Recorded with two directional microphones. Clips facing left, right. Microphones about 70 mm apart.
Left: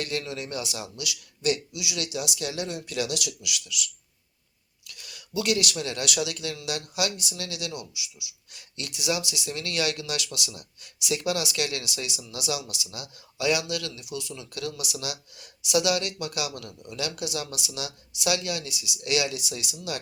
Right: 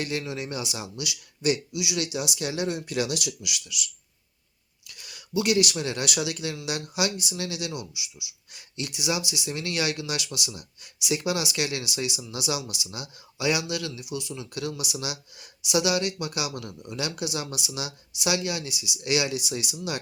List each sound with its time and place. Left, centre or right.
0.0 s speech: centre